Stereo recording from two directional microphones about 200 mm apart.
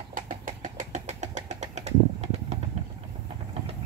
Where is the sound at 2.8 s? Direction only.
30° right (ahead or behind).